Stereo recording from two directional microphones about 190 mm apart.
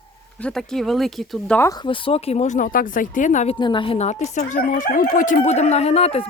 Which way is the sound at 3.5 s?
25° left (ahead or behind).